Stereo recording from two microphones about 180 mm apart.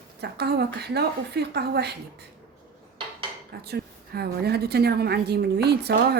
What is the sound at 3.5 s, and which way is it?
A woman's voice, 60° right (ahead or behind).